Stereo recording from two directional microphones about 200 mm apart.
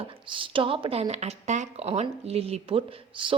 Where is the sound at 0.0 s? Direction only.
25° right (ahead or behind).